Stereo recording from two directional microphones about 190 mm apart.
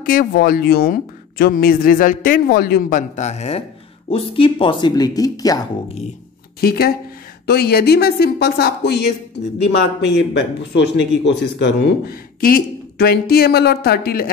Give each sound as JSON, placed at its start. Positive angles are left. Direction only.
{"t": 0.0, "sound": "speech", "side_deg": 50}
{"t": 6.6, "sound": "speech", "side_deg": 55}
{"t": 10.1, "sound": "speech", "side_deg": 65}